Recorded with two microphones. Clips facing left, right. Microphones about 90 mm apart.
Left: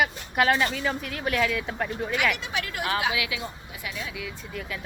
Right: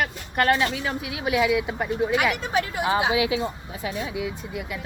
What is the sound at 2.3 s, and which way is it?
Speech, 45° right (ahead or behind).